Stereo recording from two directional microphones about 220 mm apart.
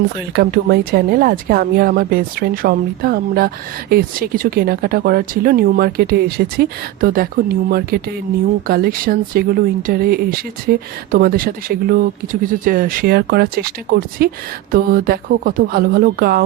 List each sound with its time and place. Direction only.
0.3 s a woman's voice: 45° right (ahead or behind)